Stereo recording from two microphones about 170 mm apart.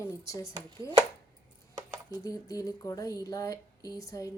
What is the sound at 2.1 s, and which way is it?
Speech, 20° left (ahead or behind).